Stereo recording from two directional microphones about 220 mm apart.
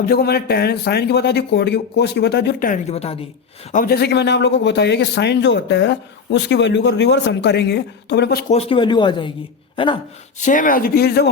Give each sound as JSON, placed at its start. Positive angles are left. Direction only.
{"t": 0.0, "sound": "a man's voice", "side_deg": 45}
{"t": 3.7, "sound": "a man's voice", "side_deg": 40}
{"t": 8.5, "sound": "speech", "side_deg": 20}
{"t": 10.4, "sound": "speech", "side_deg": 35}